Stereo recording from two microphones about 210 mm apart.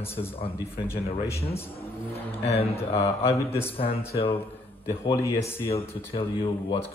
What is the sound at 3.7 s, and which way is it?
Speech, 25° left (ahead or behind).